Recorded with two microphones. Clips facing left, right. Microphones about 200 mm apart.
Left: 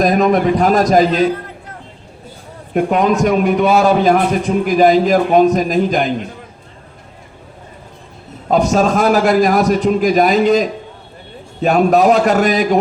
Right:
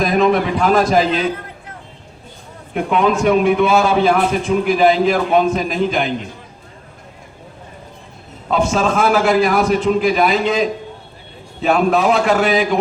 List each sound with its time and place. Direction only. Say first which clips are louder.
0.0 s a man's voice: left 2 dB; 40° left (ahead or behind)
2.7 s a man's voice: left 3 dB; 40° left (ahead or behind)
8.4 s a man's voice: left 3 dB; 40° left (ahead or behind)